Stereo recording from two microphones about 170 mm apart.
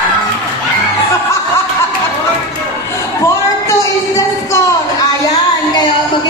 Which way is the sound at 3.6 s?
15° left (ahead or behind).